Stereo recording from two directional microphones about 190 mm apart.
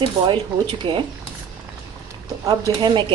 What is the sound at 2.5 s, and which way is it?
Speech, 20° right (ahead or behind).